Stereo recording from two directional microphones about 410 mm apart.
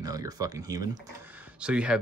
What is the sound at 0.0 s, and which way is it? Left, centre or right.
Speech, centre.